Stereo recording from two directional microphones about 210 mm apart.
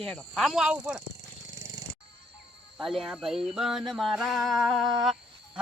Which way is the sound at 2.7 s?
Centre (ahead or behind).